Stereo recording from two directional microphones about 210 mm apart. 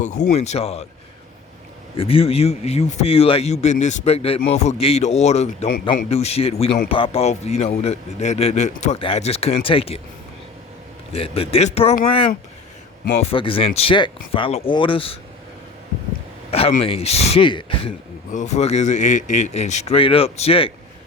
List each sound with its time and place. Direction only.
0.0 s a man's voice: 35° left (ahead or behind)
2.0 s a man's voice: 25° left (ahead or behind)
11.1 s a man's voice: 25° left (ahead or behind)
16.5 s a man's voice: 30° left (ahead or behind)